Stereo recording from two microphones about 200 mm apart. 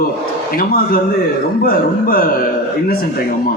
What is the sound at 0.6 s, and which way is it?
A man's voice, 45° left (ahead or behind).